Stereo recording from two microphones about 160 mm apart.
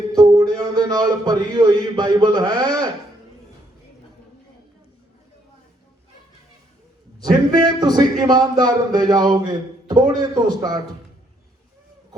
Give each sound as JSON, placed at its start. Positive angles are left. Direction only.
{"t": 0.1, "sound": "speech", "side_deg": -20}
{"t": 7.8, "sound": "speech", "side_deg": -25}